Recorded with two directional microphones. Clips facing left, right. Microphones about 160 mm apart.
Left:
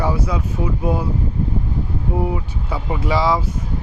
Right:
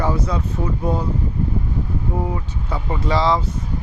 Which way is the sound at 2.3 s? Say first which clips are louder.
Left 2 dB; 10° left (ahead or behind).